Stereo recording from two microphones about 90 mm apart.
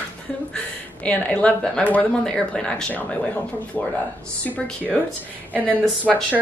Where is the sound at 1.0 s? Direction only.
15° left (ahead or behind).